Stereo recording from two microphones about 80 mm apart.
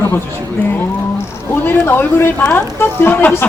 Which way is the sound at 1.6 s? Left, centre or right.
Left.